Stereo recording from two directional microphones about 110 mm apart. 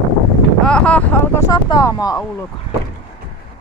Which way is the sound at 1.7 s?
35° left (ahead or behind).